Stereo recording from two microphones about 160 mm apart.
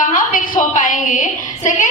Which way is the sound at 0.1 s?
55° left (ahead or behind).